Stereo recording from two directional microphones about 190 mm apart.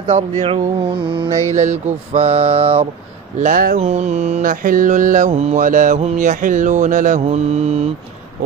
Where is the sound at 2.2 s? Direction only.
30° right (ahead or behind).